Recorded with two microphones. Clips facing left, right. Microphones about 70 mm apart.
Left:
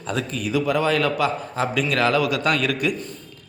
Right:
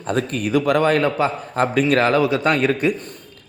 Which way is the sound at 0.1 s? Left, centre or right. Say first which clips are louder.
Right 5 dB; right.